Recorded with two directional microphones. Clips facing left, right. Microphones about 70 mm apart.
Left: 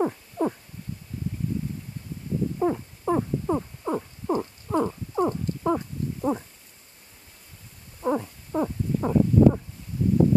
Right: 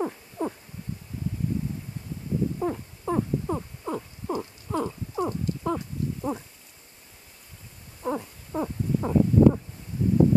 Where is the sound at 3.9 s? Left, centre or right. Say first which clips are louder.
Left 4 dB; left.